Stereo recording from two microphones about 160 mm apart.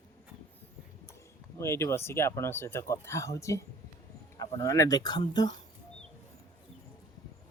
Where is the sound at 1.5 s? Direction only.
15° left (ahead or behind).